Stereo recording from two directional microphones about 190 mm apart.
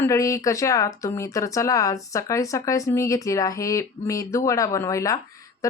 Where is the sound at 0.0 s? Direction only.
15° left (ahead or behind).